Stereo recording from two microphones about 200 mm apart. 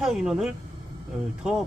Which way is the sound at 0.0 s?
Centre (ahead or behind).